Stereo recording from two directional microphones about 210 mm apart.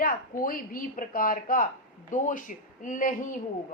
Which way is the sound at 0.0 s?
45° left (ahead or behind).